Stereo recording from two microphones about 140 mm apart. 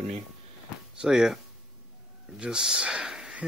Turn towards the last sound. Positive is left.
turn(degrees=-5)  # may be behind; listen again after turning